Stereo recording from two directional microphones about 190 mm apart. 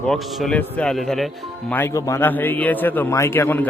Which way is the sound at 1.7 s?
15° left (ahead or behind).